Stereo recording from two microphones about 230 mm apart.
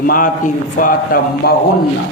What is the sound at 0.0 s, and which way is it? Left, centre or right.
A man's voice, left.